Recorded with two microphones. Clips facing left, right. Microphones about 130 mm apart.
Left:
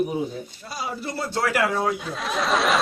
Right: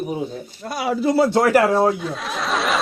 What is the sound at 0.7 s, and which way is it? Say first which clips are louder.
Speech: right 12 dB; 80° right.